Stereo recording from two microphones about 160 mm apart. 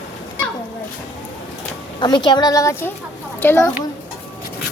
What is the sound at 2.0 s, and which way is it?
A woman's voice, 30° left (ahead or behind).